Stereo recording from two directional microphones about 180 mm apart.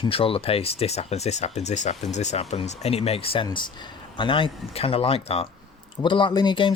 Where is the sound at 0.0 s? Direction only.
30° left (ahead or behind).